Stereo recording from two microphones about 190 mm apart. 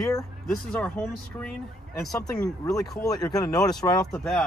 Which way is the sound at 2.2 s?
15° left (ahead or behind).